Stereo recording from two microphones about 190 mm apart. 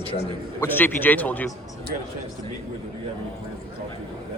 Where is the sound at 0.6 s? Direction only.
10° left (ahead or behind).